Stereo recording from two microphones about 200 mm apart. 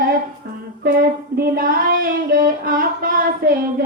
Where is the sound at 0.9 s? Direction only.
50° right (ahead or behind).